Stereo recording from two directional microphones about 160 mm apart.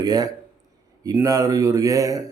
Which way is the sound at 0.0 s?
25° right (ahead or behind).